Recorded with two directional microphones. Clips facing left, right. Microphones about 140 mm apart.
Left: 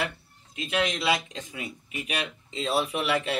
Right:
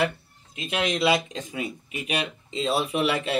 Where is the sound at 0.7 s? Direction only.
25° right (ahead or behind).